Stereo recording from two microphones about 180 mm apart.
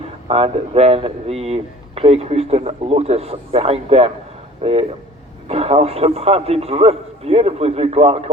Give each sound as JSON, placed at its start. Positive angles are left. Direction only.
{"t": 0.3, "sound": "speech", "side_deg": -35}